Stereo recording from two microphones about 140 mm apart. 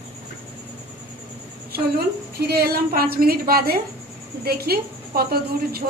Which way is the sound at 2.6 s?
90° right.